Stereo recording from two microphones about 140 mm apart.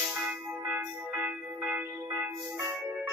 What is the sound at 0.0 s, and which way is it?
Music, 5° right (ahead or behind).